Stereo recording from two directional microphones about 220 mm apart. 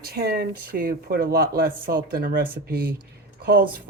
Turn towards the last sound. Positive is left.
turn(degrees=-45)  # may be behind; listen again after turning